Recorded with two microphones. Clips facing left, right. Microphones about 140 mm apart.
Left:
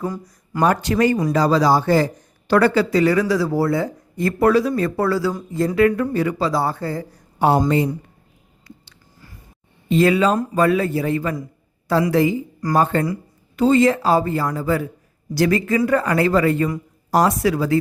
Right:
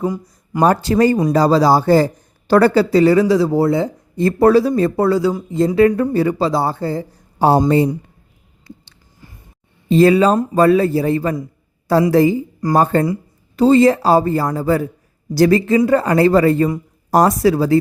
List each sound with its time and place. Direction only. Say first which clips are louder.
0.0 s speech: right 5 dB; 15° right (ahead or behind)
0.6 s a man's voice: right 4 dB; 35° right (ahead or behind)
8.6 s a sound: right 5 dB; 25° right (ahead or behind)
9.9 s speech: right 5 dB; 35° right (ahead or behind)
17.1 s speech: right 4 dB; 45° right (ahead or behind)